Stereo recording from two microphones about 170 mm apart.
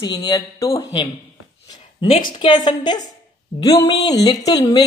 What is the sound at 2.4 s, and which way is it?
A woman's voice, 25° left (ahead or behind).